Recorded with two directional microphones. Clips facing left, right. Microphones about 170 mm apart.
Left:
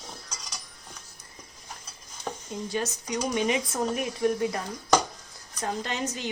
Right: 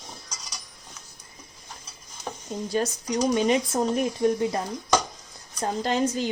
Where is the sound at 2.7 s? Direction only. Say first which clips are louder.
Right 5 dB; 35° right (ahead or behind).